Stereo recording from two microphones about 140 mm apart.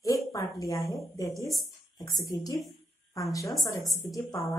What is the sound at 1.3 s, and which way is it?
Speech, centre (ahead or behind).